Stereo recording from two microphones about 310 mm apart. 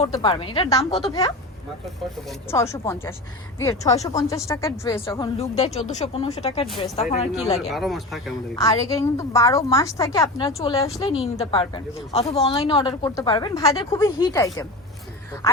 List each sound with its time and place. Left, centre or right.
0.0 s a woman's voice: centre
2.5 s a woman's voice: centre
7.7 s speech: centre
8.5 s a woman's voice: centre